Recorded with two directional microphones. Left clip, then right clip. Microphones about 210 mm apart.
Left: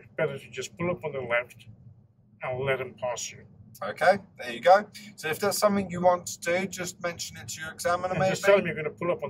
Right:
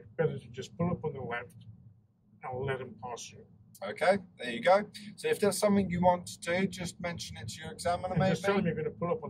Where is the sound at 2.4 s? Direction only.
40° left (ahead or behind).